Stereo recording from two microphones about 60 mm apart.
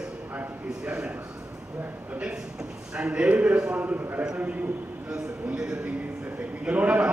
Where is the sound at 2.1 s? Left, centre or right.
Centre.